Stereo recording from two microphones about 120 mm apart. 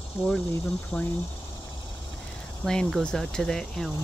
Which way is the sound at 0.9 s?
20° left (ahead or behind).